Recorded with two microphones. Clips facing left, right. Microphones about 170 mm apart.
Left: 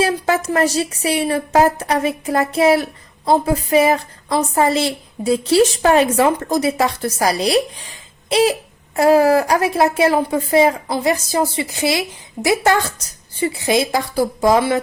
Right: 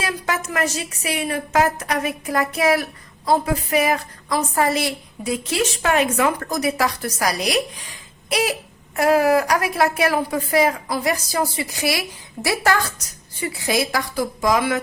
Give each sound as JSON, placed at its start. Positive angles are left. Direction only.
{"t": 0.0, "sound": "speech", "side_deg": 30}